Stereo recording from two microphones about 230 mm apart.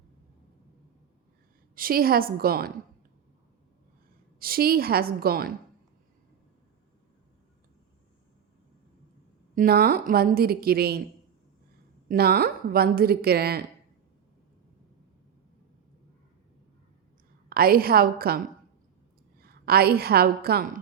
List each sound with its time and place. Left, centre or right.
1.7 s a woman's voice: right
4.4 s a woman's voice: right
9.6 s a woman's voice: right
12.0 s a woman's voice: right
17.5 s a woman's voice: right